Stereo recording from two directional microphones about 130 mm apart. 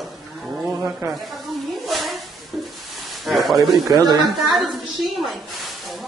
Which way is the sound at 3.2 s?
Centre (ahead or behind).